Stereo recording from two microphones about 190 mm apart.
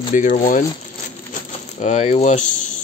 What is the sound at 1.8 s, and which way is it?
Speech, 35° left (ahead or behind).